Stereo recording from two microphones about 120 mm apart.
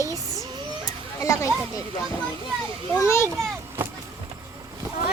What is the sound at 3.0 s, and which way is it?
Speech, 25° left (ahead or behind).